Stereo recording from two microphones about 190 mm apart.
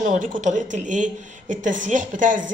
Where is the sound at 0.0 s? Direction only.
45° right (ahead or behind).